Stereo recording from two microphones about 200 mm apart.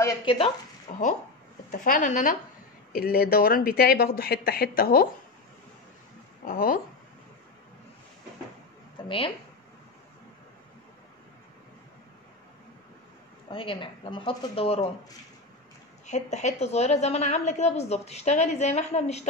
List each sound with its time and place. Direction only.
0.2 s speech: 25° left (ahead or behind)
0.9 s a sound: 35° left (ahead or behind)
1.7 s a woman's voice: 40° left (ahead or behind)
6.4 s speech: 45° left (ahead or behind)
9.0 s speech: 25° left (ahead or behind)
13.5 s speech: 25° left (ahead or behind)
16.1 s a woman's voice: 35° left (ahead or behind)